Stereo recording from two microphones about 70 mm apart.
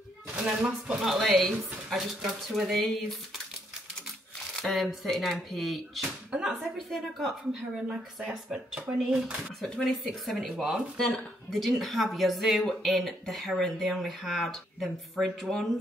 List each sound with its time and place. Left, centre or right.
0.4 s speech: centre
1.0 s a woman's voice: centre
4.6 s a woman's voice: centre
6.3 s speech: centre
6.6 s a woman's voice: centre
9.6 s a woman's voice: centre